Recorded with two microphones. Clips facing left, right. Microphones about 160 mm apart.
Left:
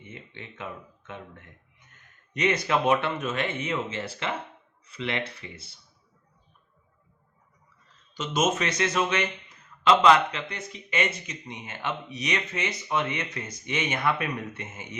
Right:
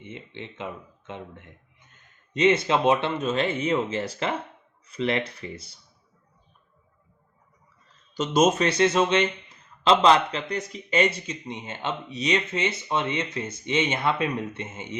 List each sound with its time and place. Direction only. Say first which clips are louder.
0.0 s a man's voice: right 5 dB; 20° right (ahead or behind); by 5.7 s 40° right (ahead or behind)
8.1 s a man's voice: right 5 dB; 40° right (ahead or behind)